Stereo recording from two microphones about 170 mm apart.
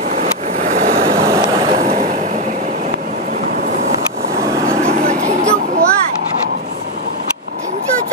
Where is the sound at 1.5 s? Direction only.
30° right (ahead or behind).